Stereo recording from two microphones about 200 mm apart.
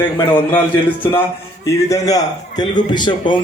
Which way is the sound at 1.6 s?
15° left (ahead or behind).